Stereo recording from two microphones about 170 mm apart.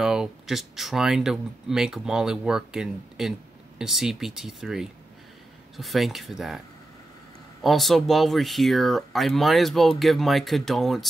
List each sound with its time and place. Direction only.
0.0 s speech: 5° right (ahead or behind)
7.6 s speech: centre (ahead or behind)